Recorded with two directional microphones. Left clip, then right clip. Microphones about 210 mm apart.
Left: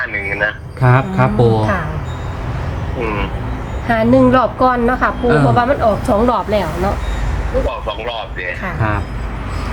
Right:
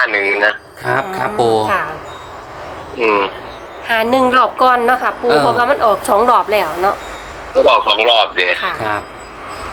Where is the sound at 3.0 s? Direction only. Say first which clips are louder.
Right 8 dB; 50° right (ahead or behind).